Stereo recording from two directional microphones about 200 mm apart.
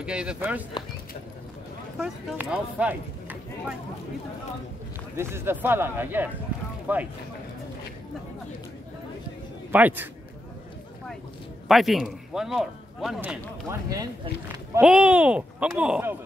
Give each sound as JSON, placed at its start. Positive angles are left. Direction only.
{"t": 0.0, "sound": "speech", "side_deg": -5}
{"t": 2.0, "sound": "speech", "side_deg": -5}
{"t": 5.1, "sound": "a man's voice", "side_deg": -10}
{"t": 9.7, "sound": "a man's voice", "side_deg": -10}
{"t": 11.6, "sound": "a man's voice", "side_deg": 0}
{"t": 13.7, "sound": "a man's voice", "side_deg": -20}
{"t": 14.8, "sound": "speech", "side_deg": -5}